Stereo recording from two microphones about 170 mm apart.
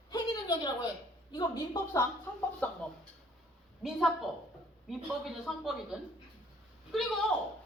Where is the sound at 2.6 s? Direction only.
10° left (ahead or behind).